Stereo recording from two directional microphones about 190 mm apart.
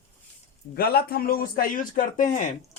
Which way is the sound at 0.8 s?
55° left (ahead or behind).